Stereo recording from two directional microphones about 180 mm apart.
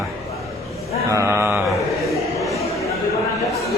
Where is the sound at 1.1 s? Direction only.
15° right (ahead or behind).